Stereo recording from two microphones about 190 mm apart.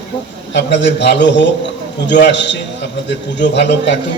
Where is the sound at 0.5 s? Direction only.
70° left (ahead or behind).